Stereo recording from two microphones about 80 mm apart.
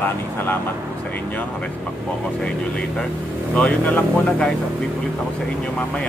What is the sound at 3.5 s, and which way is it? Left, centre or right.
Speech, centre.